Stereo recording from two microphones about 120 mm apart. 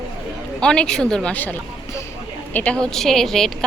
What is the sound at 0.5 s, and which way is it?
Speech, 5° left (ahead or behind).